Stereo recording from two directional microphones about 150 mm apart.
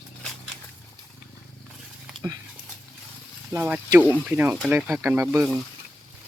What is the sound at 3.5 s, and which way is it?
Speech, 15° right (ahead or behind).